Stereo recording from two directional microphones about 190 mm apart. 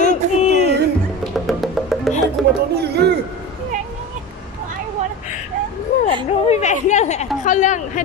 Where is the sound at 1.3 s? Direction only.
Centre (ahead or behind).